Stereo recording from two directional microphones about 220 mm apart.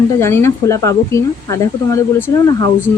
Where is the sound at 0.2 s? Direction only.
10° left (ahead or behind).